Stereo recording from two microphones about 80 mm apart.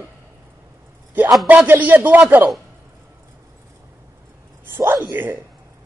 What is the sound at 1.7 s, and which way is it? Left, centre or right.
Speech, right.